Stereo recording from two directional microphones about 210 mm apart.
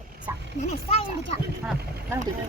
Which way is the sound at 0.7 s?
30° left (ahead or behind).